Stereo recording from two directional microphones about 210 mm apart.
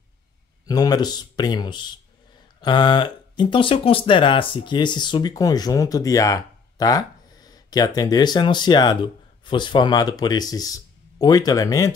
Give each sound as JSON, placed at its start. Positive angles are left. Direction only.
{"t": 0.7, "sound": "speech", "side_deg": 20}